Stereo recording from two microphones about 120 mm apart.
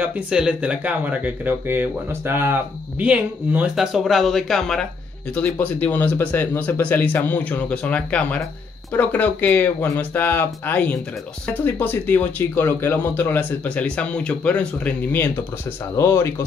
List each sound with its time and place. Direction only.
0.0 s speech: 10° right (ahead or behind); by 15.3 s 10° left (ahead or behind)
16.0 s speech: 25° left (ahead or behind)